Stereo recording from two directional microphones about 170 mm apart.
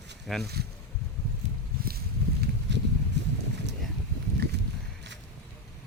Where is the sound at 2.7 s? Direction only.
90° right.